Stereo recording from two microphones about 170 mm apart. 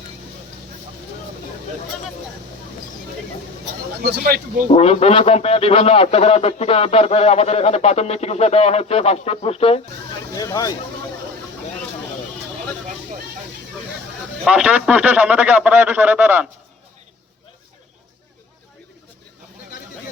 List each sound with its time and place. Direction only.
4.0 s speech: 65° right (ahead or behind)
4.7 s a man's voice: 35° left (ahead or behind)
10.3 s speech: 20° left (ahead or behind)
14.4 s speech: 5° right (ahead or behind)